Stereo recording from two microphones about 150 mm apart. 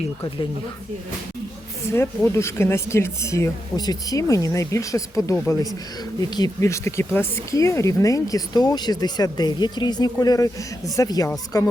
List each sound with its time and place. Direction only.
1.9 s speech: 20° left (ahead or behind)